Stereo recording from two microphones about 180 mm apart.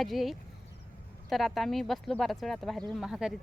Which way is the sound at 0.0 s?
Centre (ahead or behind).